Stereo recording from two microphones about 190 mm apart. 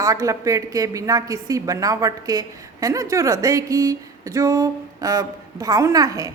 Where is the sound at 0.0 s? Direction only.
15° right (ahead or behind).